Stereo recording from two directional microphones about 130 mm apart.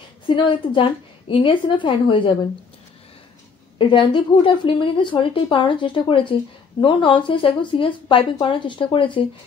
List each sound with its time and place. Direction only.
0.3 s a woman's voice: 40° left (ahead or behind)
3.7 s a woman's voice: 40° left (ahead or behind)